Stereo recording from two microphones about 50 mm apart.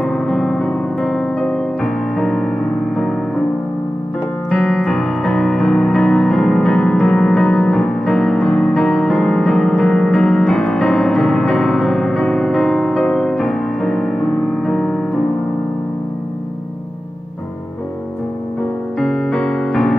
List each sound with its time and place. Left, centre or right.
0.0 s music: centre
4.5 s piano: centre
4.9 s music: centre
18.9 s music: centre